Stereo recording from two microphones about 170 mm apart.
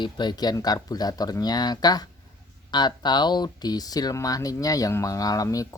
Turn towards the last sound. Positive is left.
turn(degrees=20)  # may be behind; listen again after turning